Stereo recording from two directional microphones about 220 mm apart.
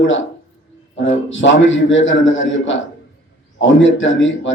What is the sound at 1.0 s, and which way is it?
A man's voice, 60° left (ahead or behind).